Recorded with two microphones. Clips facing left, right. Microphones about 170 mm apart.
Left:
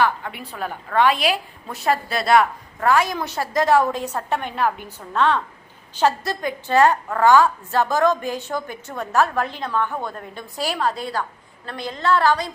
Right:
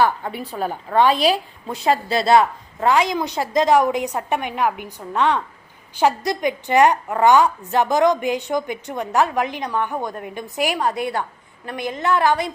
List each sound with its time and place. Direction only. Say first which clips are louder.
0.0 s a woman's voice: right 2 dB; 35° right (ahead or behind)
1.6 s a woman's voice: right 2 dB; 20° right (ahead or behind)